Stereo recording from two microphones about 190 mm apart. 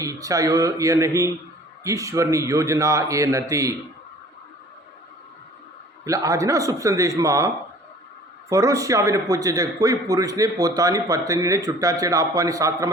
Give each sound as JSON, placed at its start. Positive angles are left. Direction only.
{"t": 0.0, "sound": "a man's voice", "side_deg": -15}
{"t": 6.1, "sound": "a man's voice", "side_deg": -15}